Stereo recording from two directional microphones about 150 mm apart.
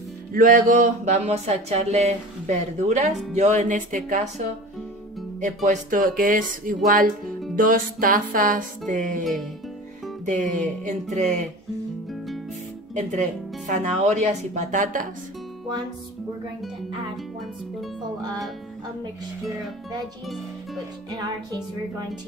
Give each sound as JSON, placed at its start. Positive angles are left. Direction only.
{"t": 0.3, "sound": "speech", "side_deg": -70}
{"t": 5.4, "sound": "speech", "side_deg": -55}
{"t": 9.2, "sound": "speech", "side_deg": 0}
{"t": 10.2, "sound": "speech", "side_deg": -55}
{"t": 12.9, "sound": "speech", "side_deg": -55}
{"t": 21.1, "sound": "speech", "side_deg": -25}